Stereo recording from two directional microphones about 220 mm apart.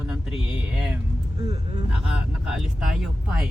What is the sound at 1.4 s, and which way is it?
Speech, 20° right (ahead or behind).